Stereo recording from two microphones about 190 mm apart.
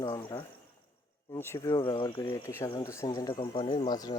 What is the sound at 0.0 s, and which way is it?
Speech, 20° left (ahead or behind).